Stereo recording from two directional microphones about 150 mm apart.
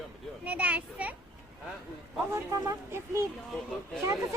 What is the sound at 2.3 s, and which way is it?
Speech, 20° right (ahead or behind).